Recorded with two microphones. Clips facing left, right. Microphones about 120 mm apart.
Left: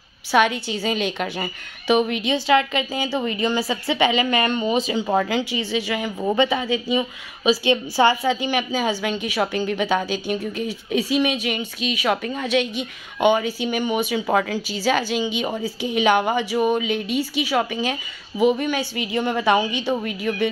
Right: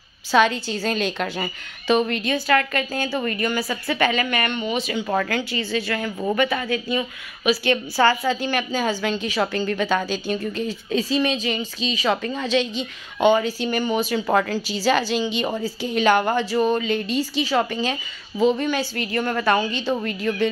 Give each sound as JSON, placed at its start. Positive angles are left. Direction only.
{"t": 0.3, "sound": "a woman's voice", "side_deg": 10}
{"t": 4.8, "sound": "a woman's voice", "side_deg": 25}
{"t": 14.2, "sound": "a woman's voice", "side_deg": 0}